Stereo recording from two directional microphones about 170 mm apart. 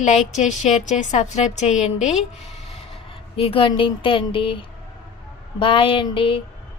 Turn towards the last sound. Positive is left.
turn(degrees=30)  # may be behind; listen again after turning